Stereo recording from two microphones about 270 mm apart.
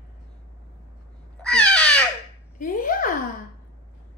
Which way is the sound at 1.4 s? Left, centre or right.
Centre.